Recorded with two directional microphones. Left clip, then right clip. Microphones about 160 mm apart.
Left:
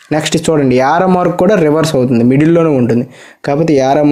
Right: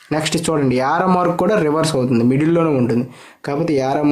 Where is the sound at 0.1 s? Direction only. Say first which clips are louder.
Left 6 dB; 25° left (ahead or behind).